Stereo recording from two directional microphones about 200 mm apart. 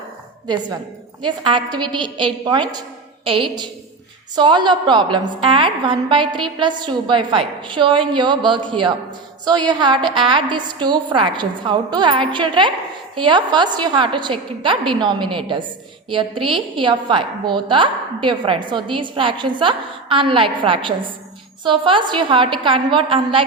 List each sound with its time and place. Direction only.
0.4 s a woman's voice: 20° right (ahead or behind)